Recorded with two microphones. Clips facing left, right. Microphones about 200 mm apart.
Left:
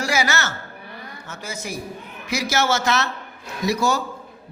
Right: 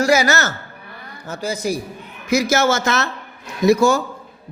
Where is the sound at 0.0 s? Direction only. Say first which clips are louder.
Right 7 dB; 40° right (ahead or behind).